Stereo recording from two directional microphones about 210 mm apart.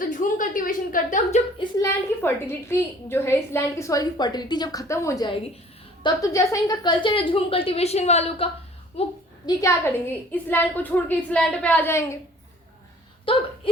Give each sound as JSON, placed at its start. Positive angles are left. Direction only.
{"t": 0.0, "sound": "a sound", "side_deg": 40}
{"t": 1.5, "sound": "a woman's voice", "side_deg": 15}
{"t": 9.6, "sound": "a woman's voice", "side_deg": 15}
{"t": 13.3, "sound": "a woman's voice", "side_deg": 25}